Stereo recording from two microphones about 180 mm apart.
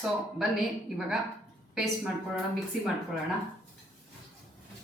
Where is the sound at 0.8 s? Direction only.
Centre (ahead or behind).